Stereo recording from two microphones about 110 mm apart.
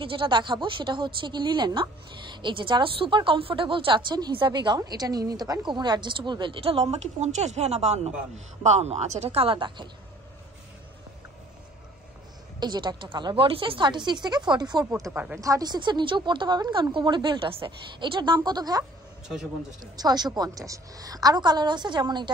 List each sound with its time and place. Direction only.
0.0 s a woman's voice: 50° right (ahead or behind)
12.5 s a woman's voice: 40° right (ahead or behind)
15.1 s speech: 20° right (ahead or behind)
15.4 s a woman's voice: 35° right (ahead or behind)